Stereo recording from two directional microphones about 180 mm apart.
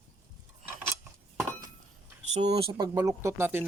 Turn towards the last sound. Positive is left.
turn(degrees=-10)  # may be behind; listen again after turning